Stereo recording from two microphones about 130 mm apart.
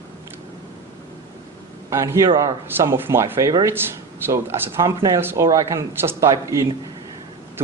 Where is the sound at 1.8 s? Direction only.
25° right (ahead or behind).